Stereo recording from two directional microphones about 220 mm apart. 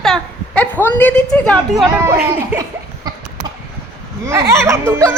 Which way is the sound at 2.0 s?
10° right (ahead or behind).